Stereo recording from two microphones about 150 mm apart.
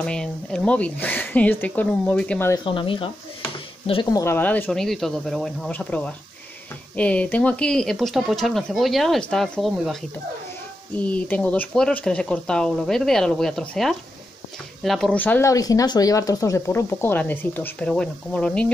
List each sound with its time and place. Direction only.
0.0 s speech: 5° left (ahead or behind)
2.5 s speech: 35° left (ahead or behind)
4.1 s speech: 15° left (ahead or behind); by 9.9 s centre (ahead or behind)
11.0 s speech: 10° left (ahead or behind)